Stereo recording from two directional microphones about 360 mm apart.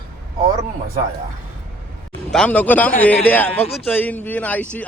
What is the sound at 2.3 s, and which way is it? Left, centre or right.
Speech, centre.